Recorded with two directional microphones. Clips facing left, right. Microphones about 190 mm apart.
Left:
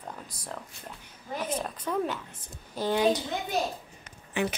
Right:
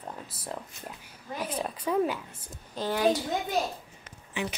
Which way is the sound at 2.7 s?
15° left (ahead or behind).